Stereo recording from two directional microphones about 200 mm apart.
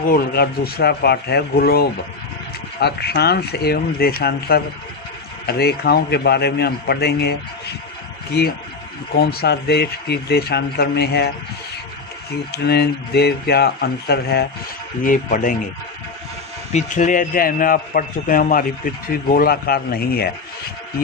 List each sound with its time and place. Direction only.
0.1 s speech: 50° left (ahead or behind)
12.5 s speech: 55° left (ahead or behind)
15.0 s speech: 40° left (ahead or behind)
16.7 s speech: 40° left (ahead or behind)